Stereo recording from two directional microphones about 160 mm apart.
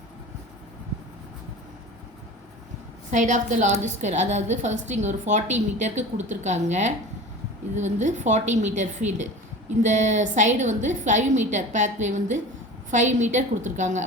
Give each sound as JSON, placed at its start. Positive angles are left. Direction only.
{"t": 3.1, "sound": "a woman's voice", "side_deg": -50}